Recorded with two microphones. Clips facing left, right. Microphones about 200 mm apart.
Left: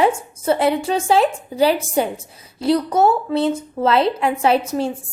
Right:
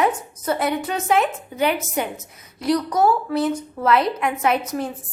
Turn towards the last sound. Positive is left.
turn(degrees=30)  # may be behind; listen again after turning